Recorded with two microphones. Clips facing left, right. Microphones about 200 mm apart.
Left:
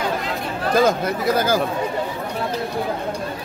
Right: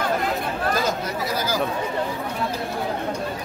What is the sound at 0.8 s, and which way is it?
Speech, 55° left (ahead or behind).